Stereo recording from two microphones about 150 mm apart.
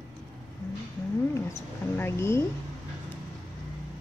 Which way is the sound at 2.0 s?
15° left (ahead or behind).